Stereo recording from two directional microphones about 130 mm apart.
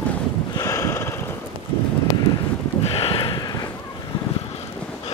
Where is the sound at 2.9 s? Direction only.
45° left (ahead or behind).